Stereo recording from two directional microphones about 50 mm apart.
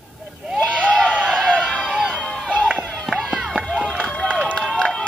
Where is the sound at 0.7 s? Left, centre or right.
Left.